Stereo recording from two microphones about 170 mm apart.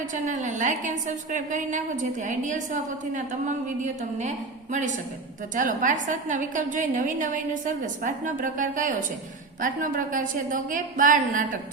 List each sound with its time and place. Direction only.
0.1 s a woman's voice: 45° right (ahead or behind)
5.5 s a woman's voice: 50° right (ahead or behind)